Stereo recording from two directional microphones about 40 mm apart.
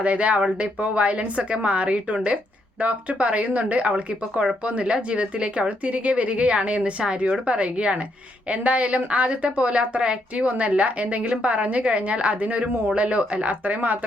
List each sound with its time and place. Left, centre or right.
0.0 s speech: right